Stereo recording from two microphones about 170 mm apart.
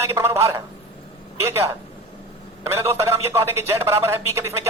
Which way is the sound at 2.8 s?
15° right (ahead or behind).